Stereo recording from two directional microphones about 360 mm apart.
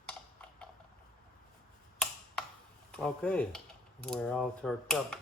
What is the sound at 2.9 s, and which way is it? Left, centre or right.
Speech, centre.